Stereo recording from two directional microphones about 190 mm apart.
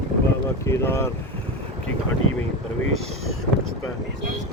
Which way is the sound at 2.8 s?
90° left.